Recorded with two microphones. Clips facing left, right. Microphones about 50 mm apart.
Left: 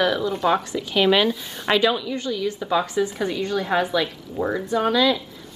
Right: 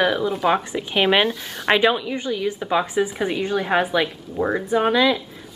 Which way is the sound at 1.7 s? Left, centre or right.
Right.